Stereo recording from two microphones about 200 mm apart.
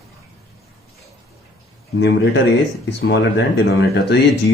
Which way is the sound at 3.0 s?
65° left (ahead or behind).